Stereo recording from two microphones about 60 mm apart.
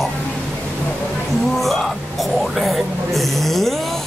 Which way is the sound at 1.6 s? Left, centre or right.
Centre.